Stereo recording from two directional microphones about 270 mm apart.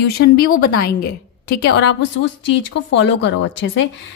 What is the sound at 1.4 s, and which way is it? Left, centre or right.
A woman's voice, left.